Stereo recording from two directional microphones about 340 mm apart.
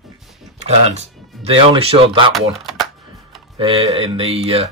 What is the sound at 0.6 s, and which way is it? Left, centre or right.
Speech, centre.